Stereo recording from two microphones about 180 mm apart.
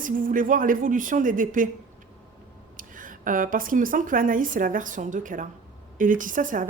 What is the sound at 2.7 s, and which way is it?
Speech, 50° right (ahead or behind).